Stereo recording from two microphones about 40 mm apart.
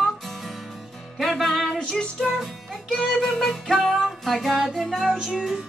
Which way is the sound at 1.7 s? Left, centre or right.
Centre.